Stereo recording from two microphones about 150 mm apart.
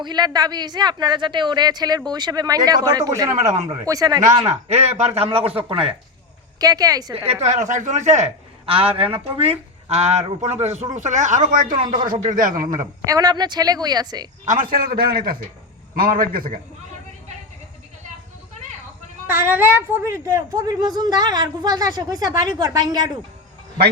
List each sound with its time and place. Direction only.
0.0 s a woman's voice: 30° right (ahead or behind)
4.4 s a man's voice: 45° right (ahead or behind)
6.6 s a woman's voice: 25° right (ahead or behind)
7.4 s a man's voice: 50° right (ahead or behind)
13.1 s a woman's voice: 25° right (ahead or behind)
14.4 s a man's voice: 60° right (ahead or behind)
19.3 s a woman's voice: 15° right (ahead or behind)